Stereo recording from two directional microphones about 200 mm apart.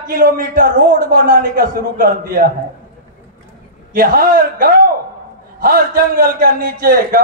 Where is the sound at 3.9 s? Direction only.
45° right (ahead or behind).